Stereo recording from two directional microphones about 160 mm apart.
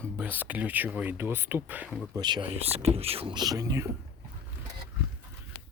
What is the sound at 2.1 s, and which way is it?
Speech, 30° right (ahead or behind).